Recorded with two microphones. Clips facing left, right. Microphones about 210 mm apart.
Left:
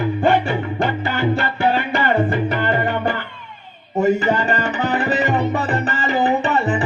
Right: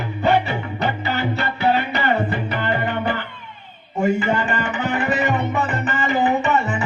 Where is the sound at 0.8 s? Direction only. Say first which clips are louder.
Left 1 dB; 50° left (ahead or behind).